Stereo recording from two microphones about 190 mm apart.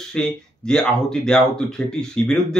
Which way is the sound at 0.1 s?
5° left (ahead or behind).